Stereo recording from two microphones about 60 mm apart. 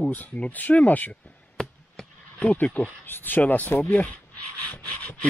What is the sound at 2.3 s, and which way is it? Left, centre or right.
Speech, left.